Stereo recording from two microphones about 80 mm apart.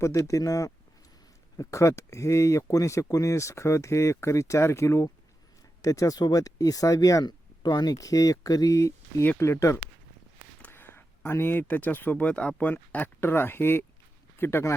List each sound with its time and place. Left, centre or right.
0.0 s speech: left
7.9 s speech: left
10.6 s a sound: left
11.3 s speech: left